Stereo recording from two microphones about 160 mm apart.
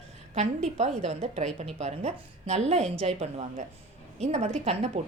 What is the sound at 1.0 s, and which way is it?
A woman's voice, 45° right (ahead or behind).